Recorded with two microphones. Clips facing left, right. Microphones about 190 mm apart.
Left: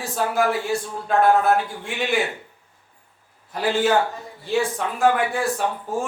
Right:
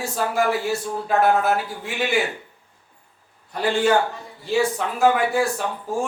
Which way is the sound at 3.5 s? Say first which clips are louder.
Right 1 dB; centre (ahead or behind).